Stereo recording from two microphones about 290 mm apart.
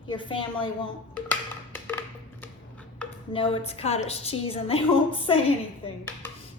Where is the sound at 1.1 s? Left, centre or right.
Centre.